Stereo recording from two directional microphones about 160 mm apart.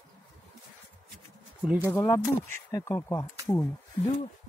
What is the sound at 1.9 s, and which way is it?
Speech, 15° left (ahead or behind).